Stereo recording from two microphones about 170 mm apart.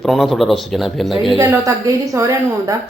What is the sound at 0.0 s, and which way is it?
Speech, centre (ahead or behind).